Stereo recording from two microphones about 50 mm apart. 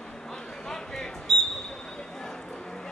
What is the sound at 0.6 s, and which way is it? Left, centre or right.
Single-lens reflex camera, centre.